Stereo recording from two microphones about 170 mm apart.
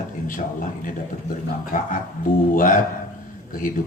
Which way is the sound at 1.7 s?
55° left (ahead or behind).